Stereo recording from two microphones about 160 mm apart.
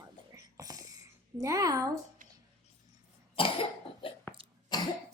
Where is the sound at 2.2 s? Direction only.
55° right (ahead or behind).